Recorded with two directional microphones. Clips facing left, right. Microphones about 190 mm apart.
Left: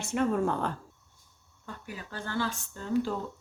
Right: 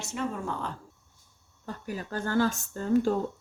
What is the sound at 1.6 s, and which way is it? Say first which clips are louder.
Speech: right 6 dB; 40° right (ahead or behind).